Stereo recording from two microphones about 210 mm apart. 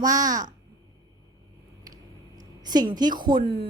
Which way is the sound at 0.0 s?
15° right (ahead or behind).